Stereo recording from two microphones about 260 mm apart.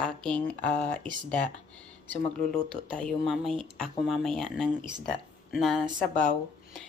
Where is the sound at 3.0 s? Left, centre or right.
Centre.